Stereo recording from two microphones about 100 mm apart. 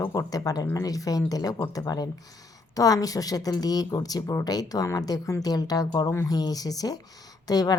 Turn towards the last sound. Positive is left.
turn(degrees=40)  # may be behind; listen again after turning